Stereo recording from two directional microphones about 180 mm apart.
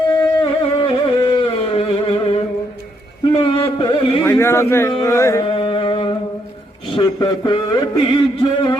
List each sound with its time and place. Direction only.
0.2 s music: 25° left (ahead or behind)
3.4 s carnatic music: 30° left (ahead or behind)
4.2 s a man's voice: 15° left (ahead or behind)
4.9 s carnatic music: 15° left (ahead or behind)
5.5 s music: 30° left (ahead or behind)
6.9 s a sound: 25° left (ahead or behind)